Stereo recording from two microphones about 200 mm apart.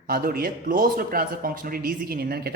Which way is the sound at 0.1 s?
50° right (ahead or behind).